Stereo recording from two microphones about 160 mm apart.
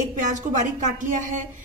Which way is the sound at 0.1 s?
50° right (ahead or behind).